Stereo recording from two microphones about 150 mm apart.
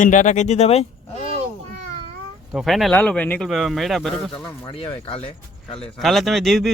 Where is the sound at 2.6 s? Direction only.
Centre (ahead or behind).